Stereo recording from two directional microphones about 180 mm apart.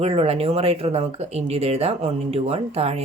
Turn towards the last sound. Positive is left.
turn(degrees=-35)  # may be behind; listen again after turning